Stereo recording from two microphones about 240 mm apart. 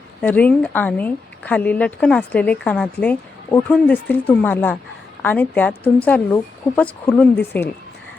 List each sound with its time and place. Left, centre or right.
0.2 s speech: centre